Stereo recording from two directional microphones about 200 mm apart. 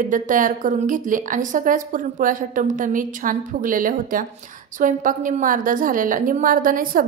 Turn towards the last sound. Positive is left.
turn(degrees=-45)  # may be behind; listen again after turning